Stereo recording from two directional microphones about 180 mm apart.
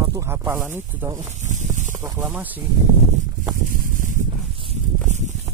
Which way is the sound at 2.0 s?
10° right (ahead or behind).